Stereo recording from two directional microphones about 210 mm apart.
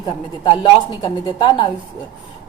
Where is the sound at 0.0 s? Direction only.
25° left (ahead or behind).